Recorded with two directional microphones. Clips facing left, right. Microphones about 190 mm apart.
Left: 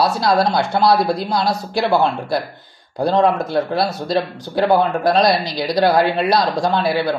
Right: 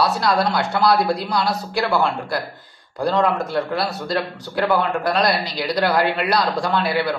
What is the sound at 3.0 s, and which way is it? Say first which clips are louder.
Speech: left 3 dB; 25° left (ahead or behind).